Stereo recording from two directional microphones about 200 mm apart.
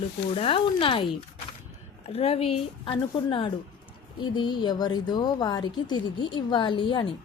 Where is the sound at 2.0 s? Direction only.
30° left (ahead or behind).